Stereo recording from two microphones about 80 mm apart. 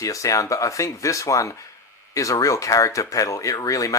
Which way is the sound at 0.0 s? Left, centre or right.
Left.